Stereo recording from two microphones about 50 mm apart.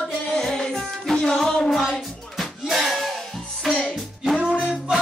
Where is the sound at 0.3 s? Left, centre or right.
Centre.